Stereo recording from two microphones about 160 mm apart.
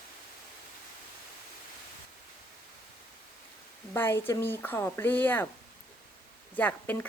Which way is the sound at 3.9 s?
15° left (ahead or behind).